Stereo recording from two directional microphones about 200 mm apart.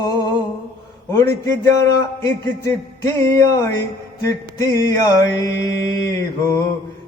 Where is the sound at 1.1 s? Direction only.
15° left (ahead or behind).